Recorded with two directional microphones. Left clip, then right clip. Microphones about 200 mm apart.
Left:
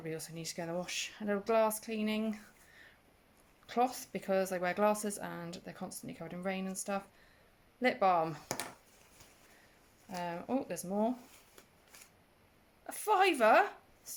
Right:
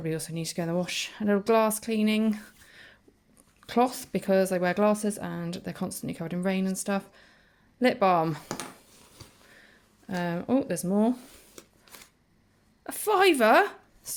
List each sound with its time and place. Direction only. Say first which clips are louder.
0.0 s speech: right 9 dB; 25° right (ahead or behind)
10.1 s speech: right 9 dB; 25° right (ahead or behind)
12.8 s speech: right 7 dB; 25° right (ahead or behind)